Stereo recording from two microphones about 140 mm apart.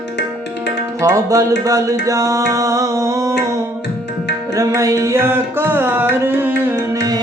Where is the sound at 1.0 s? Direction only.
20° right (ahead or behind).